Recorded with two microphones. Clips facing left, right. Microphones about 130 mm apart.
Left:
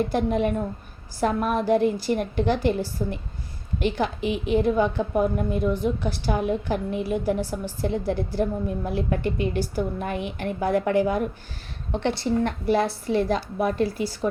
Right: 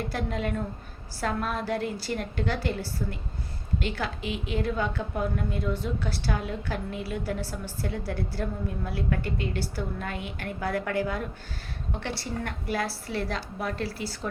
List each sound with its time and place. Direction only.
0.1 s a woman's voice: 20° left (ahead or behind)